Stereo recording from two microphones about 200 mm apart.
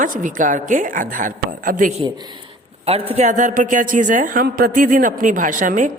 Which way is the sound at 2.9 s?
30° right (ahead or behind).